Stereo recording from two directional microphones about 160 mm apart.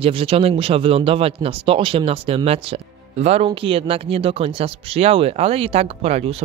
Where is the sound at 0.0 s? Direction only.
35° right (ahead or behind).